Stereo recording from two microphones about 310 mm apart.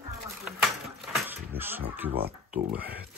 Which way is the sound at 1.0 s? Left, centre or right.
Centre.